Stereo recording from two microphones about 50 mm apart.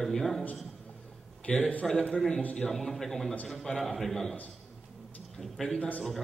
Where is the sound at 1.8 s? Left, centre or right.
Centre.